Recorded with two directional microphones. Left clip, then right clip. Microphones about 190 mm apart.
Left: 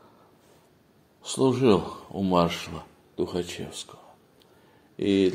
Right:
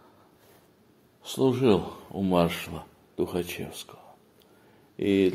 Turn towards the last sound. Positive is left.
turn(degrees=10)  # may be behind; listen again after turning